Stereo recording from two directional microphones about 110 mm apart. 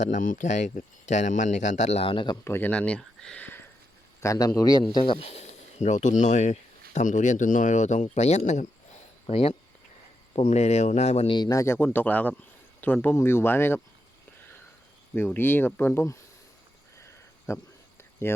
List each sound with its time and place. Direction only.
0.0 s speech: 90° left
2.0 s speech: 45° left (ahead or behind)
2.4 s speech: 20° left (ahead or behind)
4.2 s a man's voice: 30° left (ahead or behind)
4.8 s speech: 45° left (ahead or behind)
5.2 s speech: 75° left (ahead or behind)
9.2 s speech: 60° left (ahead or behind)
10.3 s speech: 75° left (ahead or behind)
11.3 s a man's voice: 40° left (ahead or behind)
11.5 s speech: 25° left (ahead or behind)
15.1 s speech: 20° left (ahead or behind)
17.0 s a sound: 25° left (ahead or behind)
18.2 s speech: 20° left (ahead or behind)